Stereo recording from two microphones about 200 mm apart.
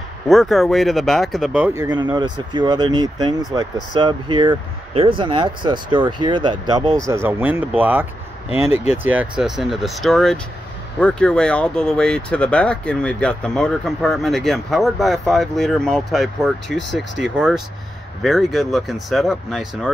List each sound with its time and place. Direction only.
0.3 s speech: centre (ahead or behind)